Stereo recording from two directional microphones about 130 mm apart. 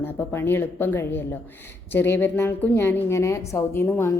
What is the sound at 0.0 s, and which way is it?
A woman's voice, 15° left (ahead or behind).